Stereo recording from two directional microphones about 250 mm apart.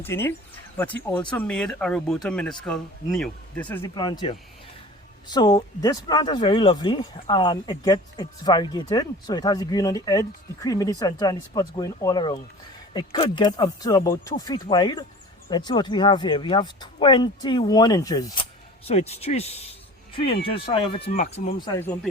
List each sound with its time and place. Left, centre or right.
0.0 s speech: centre
18.9 s speech: left
21.0 s speech: left; by 21.9 s centre